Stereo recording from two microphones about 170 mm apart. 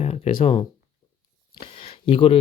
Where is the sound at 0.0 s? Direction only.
35° left (ahead or behind).